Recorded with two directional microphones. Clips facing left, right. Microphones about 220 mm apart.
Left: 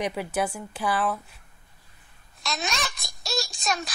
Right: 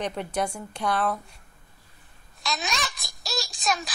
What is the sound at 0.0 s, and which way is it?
A child's voice, 5° left (ahead or behind).